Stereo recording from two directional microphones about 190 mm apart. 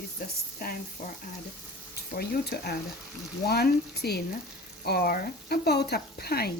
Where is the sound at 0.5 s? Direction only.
50° left (ahead or behind).